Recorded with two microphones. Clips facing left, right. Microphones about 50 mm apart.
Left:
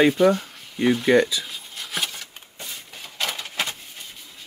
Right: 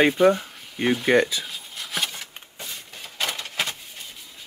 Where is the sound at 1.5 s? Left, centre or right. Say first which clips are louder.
Even; centre.